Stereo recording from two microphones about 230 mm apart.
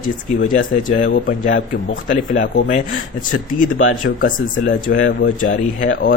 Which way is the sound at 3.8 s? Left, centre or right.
Left.